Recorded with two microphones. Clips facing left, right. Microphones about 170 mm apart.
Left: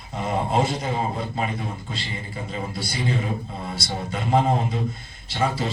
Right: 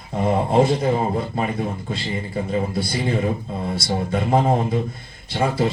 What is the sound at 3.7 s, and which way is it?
Speech, 50° right (ahead or behind).